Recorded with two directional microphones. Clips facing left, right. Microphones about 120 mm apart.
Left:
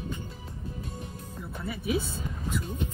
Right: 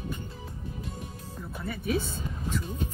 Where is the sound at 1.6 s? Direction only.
5° left (ahead or behind).